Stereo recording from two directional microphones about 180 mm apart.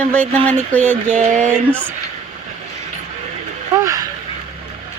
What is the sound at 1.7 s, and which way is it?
Speech, 5° left (ahead or behind).